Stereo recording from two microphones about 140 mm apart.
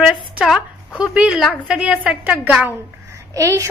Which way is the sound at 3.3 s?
25° right (ahead or behind).